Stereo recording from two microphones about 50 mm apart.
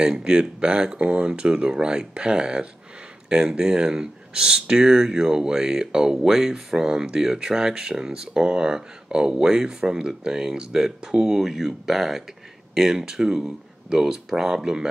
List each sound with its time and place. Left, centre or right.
0.0 s speech: centre